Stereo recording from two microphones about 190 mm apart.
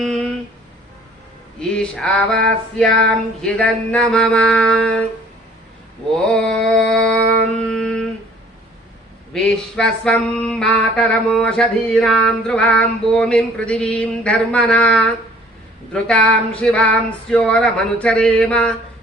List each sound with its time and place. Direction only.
1.5 s a sound: 5° left (ahead or behind)
3.4 s mantra: 5° left (ahead or behind)
6.3 s mantra: 5° left (ahead or behind)
9.3 s mantra: 5° left (ahead or behind)